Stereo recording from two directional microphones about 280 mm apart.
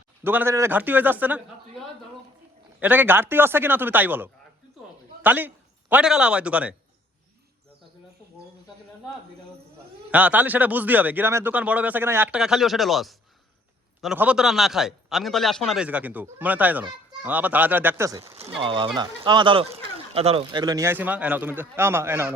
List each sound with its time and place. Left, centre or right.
0.3 s speech: centre
2.8 s speech: centre
10.1 s speech: centre